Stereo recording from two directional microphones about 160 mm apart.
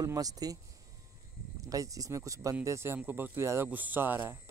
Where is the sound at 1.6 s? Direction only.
20° right (ahead or behind).